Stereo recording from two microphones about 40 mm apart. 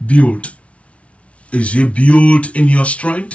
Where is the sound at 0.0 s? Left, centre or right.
Left.